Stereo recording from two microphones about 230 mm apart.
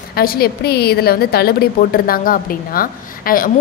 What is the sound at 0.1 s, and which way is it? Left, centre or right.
A woman's voice, left.